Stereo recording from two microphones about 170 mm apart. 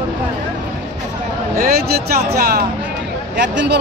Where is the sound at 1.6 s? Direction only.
65° right (ahead or behind).